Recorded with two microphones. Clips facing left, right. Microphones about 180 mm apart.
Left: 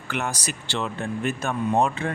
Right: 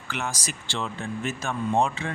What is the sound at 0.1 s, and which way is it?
Speech, 60° left (ahead or behind).